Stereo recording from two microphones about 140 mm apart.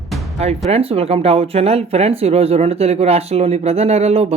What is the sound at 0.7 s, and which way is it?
Speech, 45° right (ahead or behind).